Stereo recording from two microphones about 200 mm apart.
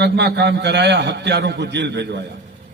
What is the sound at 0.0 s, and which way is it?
A man's voice, 60° right (ahead or behind).